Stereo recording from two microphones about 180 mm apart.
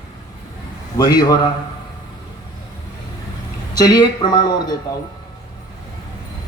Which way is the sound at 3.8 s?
20° left (ahead or behind).